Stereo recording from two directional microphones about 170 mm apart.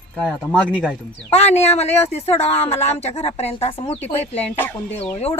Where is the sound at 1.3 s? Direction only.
40° left (ahead or behind).